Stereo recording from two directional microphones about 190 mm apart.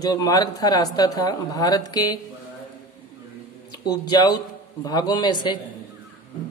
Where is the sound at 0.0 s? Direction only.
20° left (ahead or behind).